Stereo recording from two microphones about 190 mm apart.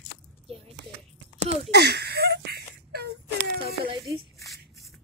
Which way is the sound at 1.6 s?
60° right (ahead or behind).